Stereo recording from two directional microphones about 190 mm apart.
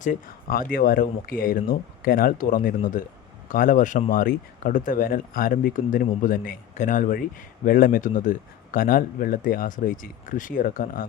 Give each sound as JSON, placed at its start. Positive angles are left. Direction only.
{"t": 0.0, "sound": "speech", "side_deg": 45}